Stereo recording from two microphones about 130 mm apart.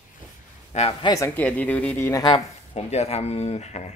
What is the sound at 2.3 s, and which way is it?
Speech, 55° left (ahead or behind).